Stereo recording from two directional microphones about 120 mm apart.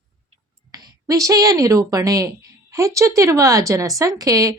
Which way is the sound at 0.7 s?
30° right (ahead or behind).